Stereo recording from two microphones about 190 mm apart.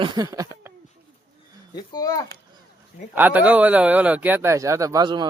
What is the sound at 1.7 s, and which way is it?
Speech, 20° left (ahead or behind).